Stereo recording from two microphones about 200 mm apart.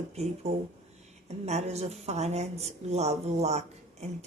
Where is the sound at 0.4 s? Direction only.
30° right (ahead or behind).